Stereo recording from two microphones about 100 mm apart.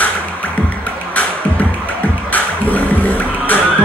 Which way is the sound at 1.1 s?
15° left (ahead or behind).